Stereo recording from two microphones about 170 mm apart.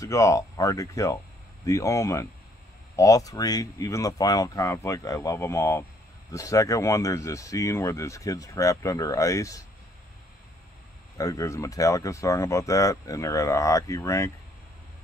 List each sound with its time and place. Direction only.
0.0 s speech: 20° left (ahead or behind)
11.1 s speech: 20° left (ahead or behind)